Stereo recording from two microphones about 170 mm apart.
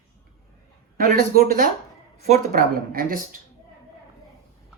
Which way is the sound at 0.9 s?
55° right (ahead or behind).